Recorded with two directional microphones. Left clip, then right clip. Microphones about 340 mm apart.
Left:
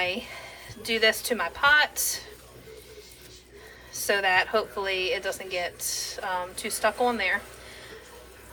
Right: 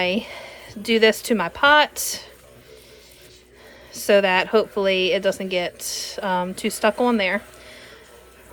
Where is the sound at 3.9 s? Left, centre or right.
Centre.